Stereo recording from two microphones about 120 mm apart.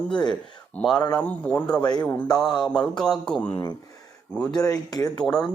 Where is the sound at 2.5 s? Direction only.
35° left (ahead or behind).